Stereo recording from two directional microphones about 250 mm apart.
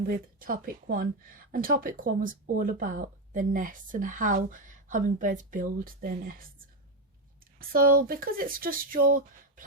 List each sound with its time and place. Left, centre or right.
0.0 s speech: right
7.7 s speech: right